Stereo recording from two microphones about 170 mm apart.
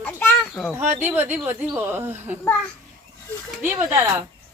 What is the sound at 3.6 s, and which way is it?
Speech, 15° right (ahead or behind).